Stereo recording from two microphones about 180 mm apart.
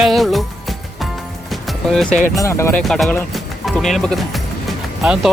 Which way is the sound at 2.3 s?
15° left (ahead or behind).